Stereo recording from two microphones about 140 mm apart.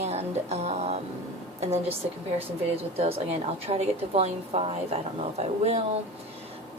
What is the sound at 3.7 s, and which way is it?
A woman's voice, 45° right (ahead or behind).